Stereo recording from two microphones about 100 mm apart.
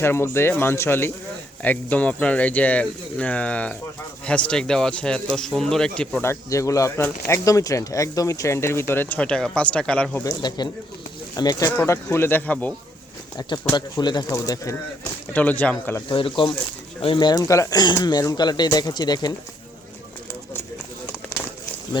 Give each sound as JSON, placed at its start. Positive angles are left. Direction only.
{"t": 0.0, "sound": "speech", "side_deg": 25}
{"t": 6.2, "sound": "speech", "side_deg": 30}
{"t": 10.2, "sound": "speech", "side_deg": 45}
{"t": 11.8, "sound": "speech", "side_deg": 30}
{"t": 13.7, "sound": "speech", "side_deg": 45}
{"t": 14.3, "sound": "speech", "side_deg": 35}
{"t": 15.3, "sound": "speech", "side_deg": 15}
{"t": 16.0, "sound": "speech", "side_deg": 55}